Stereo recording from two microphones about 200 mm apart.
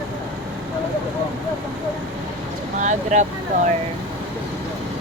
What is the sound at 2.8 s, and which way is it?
Speech, 40° right (ahead or behind).